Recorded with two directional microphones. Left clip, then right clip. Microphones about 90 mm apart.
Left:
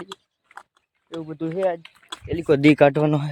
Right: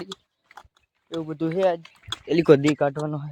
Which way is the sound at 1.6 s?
15° right (ahead or behind).